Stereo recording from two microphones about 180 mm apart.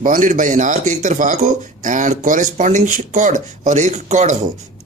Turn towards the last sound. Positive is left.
turn(degrees=-40)  # may be behind; listen again after turning